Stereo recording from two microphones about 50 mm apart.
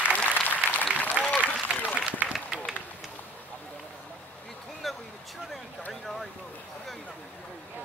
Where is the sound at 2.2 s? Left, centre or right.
Right.